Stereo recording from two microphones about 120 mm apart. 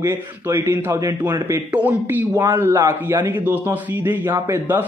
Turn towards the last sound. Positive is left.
turn(degrees=-20)  # may be behind; listen again after turning